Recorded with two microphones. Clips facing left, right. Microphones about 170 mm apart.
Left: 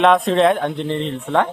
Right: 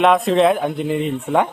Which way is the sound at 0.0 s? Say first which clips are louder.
Even; centre (ahead or behind).